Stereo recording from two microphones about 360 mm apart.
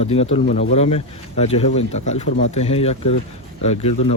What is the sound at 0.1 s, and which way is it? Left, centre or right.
Speech, centre.